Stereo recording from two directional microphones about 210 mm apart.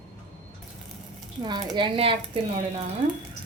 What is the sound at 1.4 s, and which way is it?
Speech, 20° right (ahead or behind).